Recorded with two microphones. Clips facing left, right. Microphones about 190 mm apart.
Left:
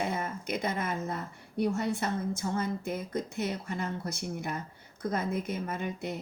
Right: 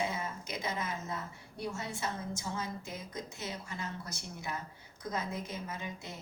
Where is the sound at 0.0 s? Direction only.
55° left (ahead or behind).